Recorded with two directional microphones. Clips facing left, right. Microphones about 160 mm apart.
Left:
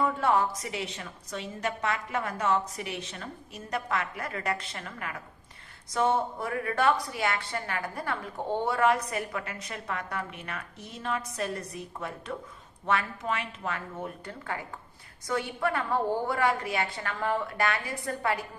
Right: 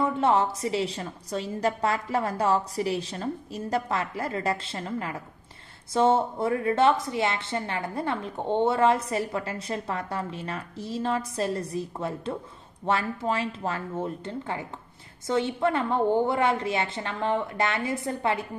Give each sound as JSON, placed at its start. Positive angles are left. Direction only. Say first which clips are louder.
{"t": 0.0, "sound": "a woman's voice", "louder": "right 3 dB", "side_deg": -25}